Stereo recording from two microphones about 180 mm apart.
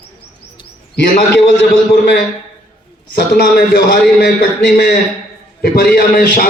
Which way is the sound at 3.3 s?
60° left (ahead or behind).